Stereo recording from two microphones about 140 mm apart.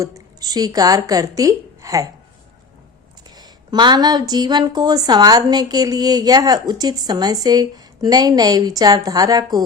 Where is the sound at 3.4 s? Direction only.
30° right (ahead or behind).